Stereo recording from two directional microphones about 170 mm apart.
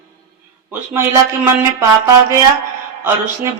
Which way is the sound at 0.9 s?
15° right (ahead or behind).